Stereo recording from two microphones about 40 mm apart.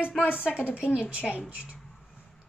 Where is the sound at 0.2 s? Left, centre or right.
Left.